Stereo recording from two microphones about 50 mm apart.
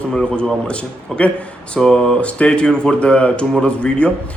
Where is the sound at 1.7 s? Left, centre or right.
Centre.